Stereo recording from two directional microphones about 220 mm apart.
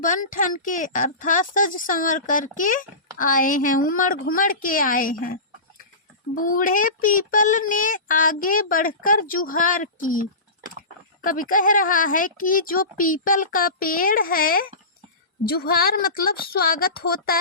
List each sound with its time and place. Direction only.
0.0 s speech: 35° left (ahead or behind)